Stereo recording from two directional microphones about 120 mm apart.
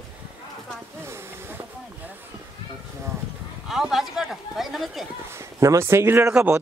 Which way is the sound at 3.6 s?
5° right (ahead or behind).